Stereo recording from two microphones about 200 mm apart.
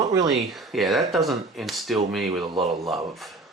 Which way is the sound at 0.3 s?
Centre (ahead or behind).